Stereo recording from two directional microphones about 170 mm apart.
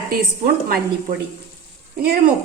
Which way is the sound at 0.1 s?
60° right (ahead or behind).